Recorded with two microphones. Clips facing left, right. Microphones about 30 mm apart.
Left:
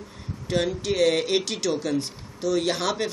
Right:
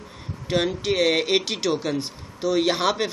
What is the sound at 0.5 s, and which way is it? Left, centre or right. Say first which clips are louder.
Speech: right 2 dB; right.